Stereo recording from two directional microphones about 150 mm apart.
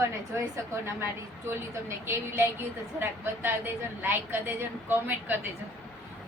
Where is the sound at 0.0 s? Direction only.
20° right (ahead or behind).